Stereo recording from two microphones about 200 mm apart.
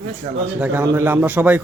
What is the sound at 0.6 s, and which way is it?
A man's voice, 10° right (ahead or behind).